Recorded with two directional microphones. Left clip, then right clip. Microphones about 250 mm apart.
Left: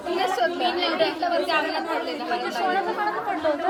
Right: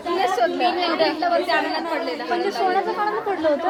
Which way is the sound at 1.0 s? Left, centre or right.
Right.